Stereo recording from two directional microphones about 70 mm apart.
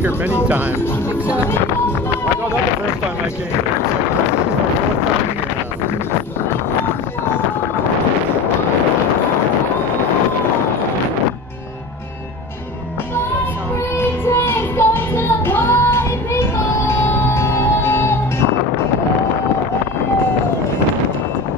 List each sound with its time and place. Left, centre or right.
13.9 s music: left